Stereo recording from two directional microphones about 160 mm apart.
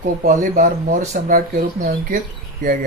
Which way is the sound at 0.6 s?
55° right (ahead or behind).